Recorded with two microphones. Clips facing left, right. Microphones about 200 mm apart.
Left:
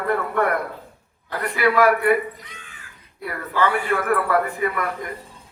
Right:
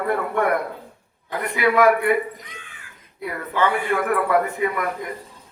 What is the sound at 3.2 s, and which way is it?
Speech, 20° right (ahead or behind).